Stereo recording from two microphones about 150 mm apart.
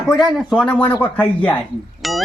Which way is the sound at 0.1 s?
Centre (ahead or behind).